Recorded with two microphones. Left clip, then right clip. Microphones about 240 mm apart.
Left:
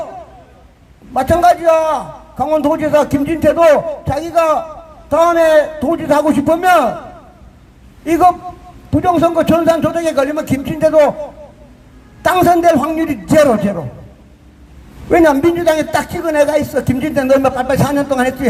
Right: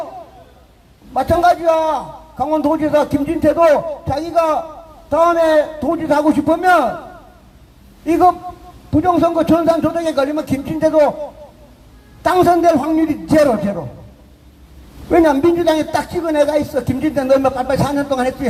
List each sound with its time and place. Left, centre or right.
1.1 s a man's voice: left
8.0 s a man's voice: left
12.2 s a man's voice: left
15.1 s a man's voice: left